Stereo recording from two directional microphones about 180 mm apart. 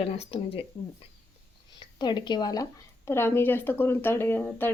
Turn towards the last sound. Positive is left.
turn(degrees=10)  # may be behind; listen again after turning